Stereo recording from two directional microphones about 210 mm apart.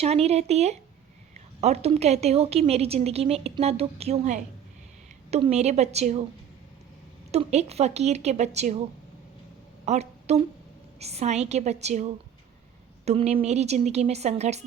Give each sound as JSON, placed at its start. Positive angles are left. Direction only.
{"t": 0.0, "sound": "a woman's voice", "side_deg": -30}
{"t": 7.3, "sound": "speech", "side_deg": -30}
{"t": 9.8, "sound": "a sound", "side_deg": -30}
{"t": 11.0, "sound": "speech", "side_deg": -30}